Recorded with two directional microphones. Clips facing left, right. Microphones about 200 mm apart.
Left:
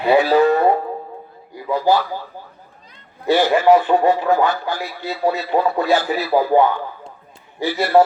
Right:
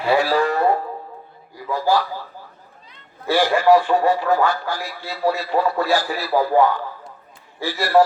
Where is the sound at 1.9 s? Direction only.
20° left (ahead or behind).